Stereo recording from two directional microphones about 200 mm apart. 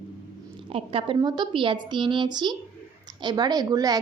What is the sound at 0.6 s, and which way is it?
A woman's voice, 25° right (ahead or behind).